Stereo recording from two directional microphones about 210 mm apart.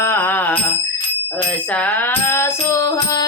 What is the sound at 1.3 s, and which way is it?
Bicycle bell, 5° left (ahead or behind).